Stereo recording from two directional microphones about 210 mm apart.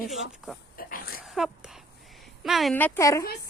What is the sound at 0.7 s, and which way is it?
Pig, 45° left (ahead or behind).